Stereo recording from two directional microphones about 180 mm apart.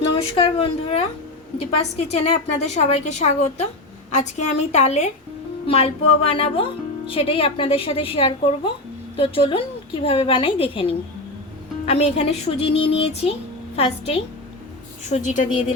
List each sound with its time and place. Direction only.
0.2 s a woman's voice: 35° left (ahead or behind)